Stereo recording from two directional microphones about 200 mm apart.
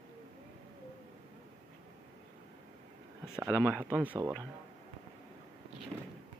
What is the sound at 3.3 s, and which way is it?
Speech, 5° right (ahead or behind).